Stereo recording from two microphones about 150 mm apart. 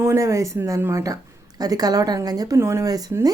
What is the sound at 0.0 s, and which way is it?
A woman's voice, 20° right (ahead or behind).